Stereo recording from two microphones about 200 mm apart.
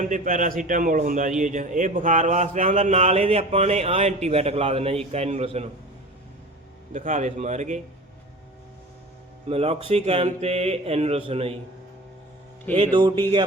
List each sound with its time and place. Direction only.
0.0 s a man's voice: 40° right (ahead or behind)
6.9 s a man's voice: 35° right (ahead or behind)
9.5 s a man's voice: 30° right (ahead or behind)
12.7 s music: 25° right (ahead or behind)